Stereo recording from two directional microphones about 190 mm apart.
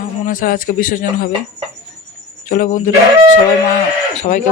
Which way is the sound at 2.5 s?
45° left (ahead or behind).